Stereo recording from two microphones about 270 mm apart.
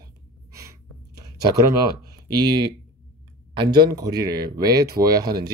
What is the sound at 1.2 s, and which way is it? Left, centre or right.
Speech, centre.